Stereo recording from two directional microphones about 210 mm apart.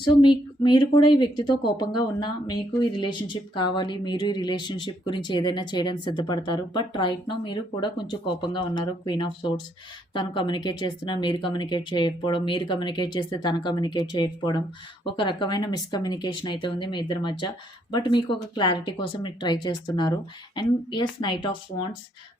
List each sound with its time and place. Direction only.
0.0 s speech: 20° left (ahead or behind)